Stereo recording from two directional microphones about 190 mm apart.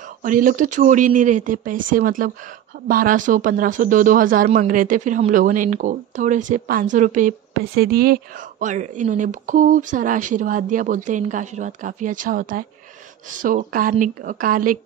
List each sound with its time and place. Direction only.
0.2 s a woman's voice: 45° right (ahead or behind)